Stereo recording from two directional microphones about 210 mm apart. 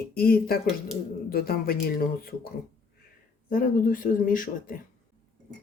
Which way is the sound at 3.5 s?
40° left (ahead or behind).